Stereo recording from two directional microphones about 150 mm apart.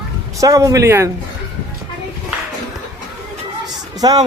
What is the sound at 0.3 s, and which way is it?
Speech, 20° right (ahead or behind).